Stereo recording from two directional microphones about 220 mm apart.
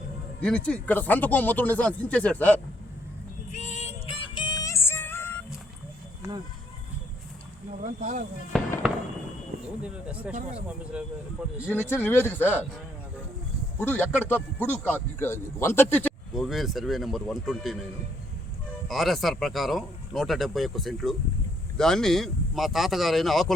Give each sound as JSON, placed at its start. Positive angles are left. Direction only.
{"t": 0.4, "sound": "speech", "side_deg": 5}
{"t": 3.5, "sound": "music", "side_deg": 30}
{"t": 7.8, "sound": "speech", "side_deg": -35}
{"t": 8.5, "sound": "speech", "side_deg": 0}
{"t": 9.8, "sound": "speech", "side_deg": -5}
{"t": 11.7, "sound": "speech", "side_deg": 10}
{"t": 13.7, "sound": "speech", "side_deg": 10}
{"t": 18.9, "sound": "speech", "side_deg": 0}